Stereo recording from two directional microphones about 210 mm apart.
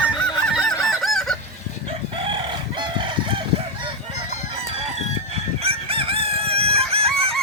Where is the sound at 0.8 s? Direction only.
Centre (ahead or behind).